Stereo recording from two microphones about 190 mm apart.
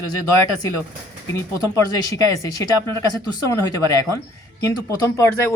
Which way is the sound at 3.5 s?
20° left (ahead or behind).